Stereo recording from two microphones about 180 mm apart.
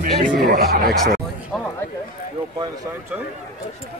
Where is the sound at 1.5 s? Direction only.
5° left (ahead or behind).